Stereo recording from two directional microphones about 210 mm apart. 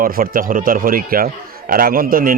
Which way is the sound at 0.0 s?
45° right (ahead or behind).